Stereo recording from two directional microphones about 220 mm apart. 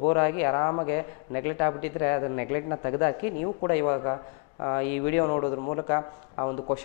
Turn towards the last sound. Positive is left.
turn(degrees=20)  # may be behind; listen again after turning